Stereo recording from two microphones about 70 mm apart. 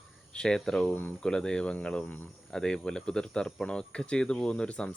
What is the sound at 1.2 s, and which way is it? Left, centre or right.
Speech, centre.